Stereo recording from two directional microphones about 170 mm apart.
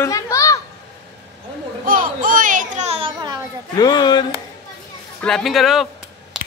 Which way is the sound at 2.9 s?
30° right (ahead or behind).